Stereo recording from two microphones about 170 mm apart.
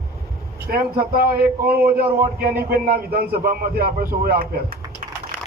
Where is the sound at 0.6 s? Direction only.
60° right (ahead or behind).